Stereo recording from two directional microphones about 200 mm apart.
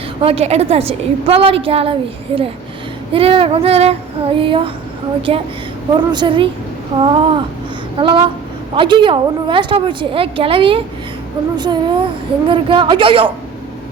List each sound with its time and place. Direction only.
0.2 s a woman's voice: 30° right (ahead or behind)